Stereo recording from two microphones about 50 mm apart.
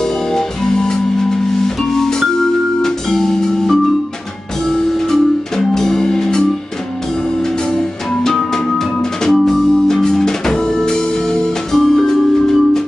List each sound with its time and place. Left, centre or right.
0.0 s music: centre
7.7 s music: centre